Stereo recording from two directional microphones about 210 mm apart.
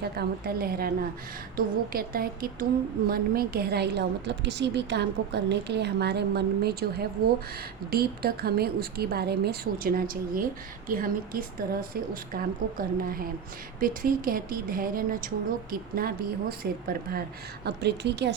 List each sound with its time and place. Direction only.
0.0 s a woman's voice: 50° right (ahead or behind)
7.9 s a woman's voice: 45° right (ahead or behind)